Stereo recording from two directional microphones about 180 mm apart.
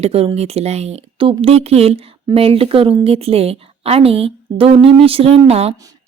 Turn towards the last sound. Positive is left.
turn(degrees=-35)  # may be behind; listen again after turning